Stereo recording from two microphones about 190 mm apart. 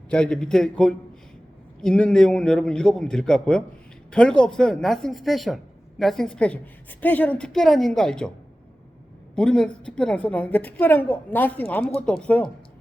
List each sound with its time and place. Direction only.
0.1 s a man's voice: 5° left (ahead or behind)
9.3 s a woman's voice: 5° left (ahead or behind)